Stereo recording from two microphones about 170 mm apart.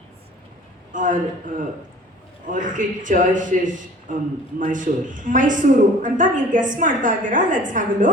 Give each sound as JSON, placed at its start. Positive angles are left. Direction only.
{"t": 0.9, "sound": "a woman's voice", "side_deg": -50}